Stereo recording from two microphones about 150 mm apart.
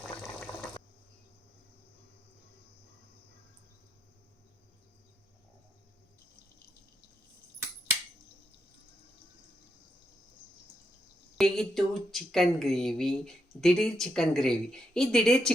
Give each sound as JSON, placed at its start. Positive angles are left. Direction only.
{"t": 0.0, "sound": "water", "side_deg": 5}
{"t": 11.3, "sound": "a woman's voice", "side_deg": 0}